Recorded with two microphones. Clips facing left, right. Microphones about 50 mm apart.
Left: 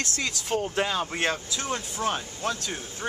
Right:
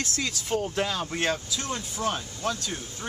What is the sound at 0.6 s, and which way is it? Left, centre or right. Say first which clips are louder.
Speech: left 2 dB; centre.